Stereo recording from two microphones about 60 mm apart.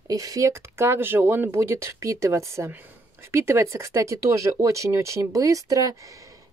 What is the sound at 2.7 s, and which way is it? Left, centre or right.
Speech, right.